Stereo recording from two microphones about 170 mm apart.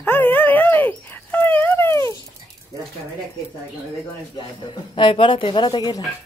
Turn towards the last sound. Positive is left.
turn(degrees=25)  # may be behind; listen again after turning